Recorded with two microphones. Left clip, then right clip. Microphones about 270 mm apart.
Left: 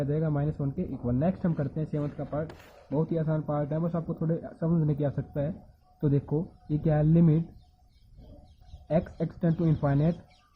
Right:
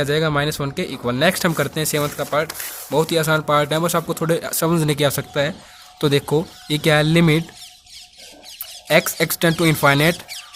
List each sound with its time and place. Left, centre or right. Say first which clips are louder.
0.1 s speech: right 13 dB; right
8.9 s speech: right 13 dB; right